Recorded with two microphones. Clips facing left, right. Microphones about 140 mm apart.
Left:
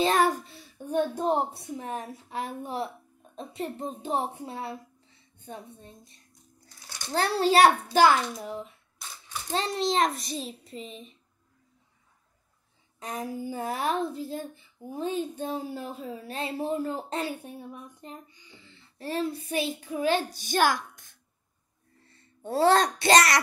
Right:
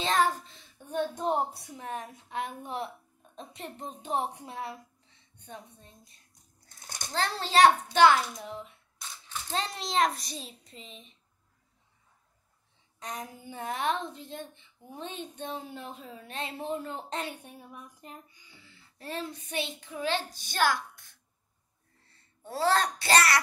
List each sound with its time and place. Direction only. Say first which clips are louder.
0.0 s a sound: left 4 dB; 10° left (ahead or behind)
1.5 s a woman's voice: left 4 dB; centre (ahead or behind)
7.2 s a child's voice: left 3 dB; 10° left (ahead or behind)
13.0 s a woman's voice: left 7 dB; 5° left (ahead or behind)
18.3 s a child's voice: left 4 dB; 10° right (ahead or behind); by 20.7 s 15° left (ahead or behind)
22.4 s a child's voice: left 5 dB; 25° left (ahead or behind)